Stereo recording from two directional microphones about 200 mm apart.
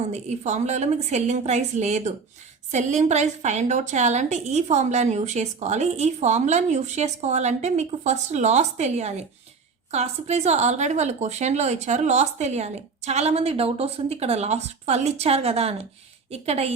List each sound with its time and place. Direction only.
0.1 s a woman's voice: 35° right (ahead or behind)